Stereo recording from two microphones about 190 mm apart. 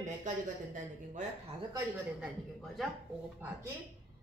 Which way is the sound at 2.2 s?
Centre (ahead or behind).